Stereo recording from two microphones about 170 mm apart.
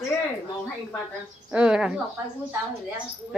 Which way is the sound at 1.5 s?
5° right (ahead or behind).